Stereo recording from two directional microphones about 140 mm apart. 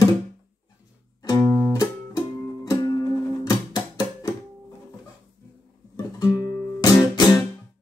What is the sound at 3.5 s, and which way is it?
Music, 30° left (ahead or behind).